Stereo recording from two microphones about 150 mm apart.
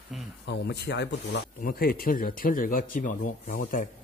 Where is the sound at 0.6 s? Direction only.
90° left.